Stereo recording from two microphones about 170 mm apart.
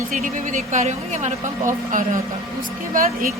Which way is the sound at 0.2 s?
45° right (ahead or behind).